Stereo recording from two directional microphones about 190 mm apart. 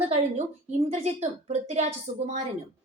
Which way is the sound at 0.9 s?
35° right (ahead or behind).